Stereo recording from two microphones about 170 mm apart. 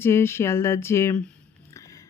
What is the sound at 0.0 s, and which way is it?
Speech, 15° left (ahead or behind).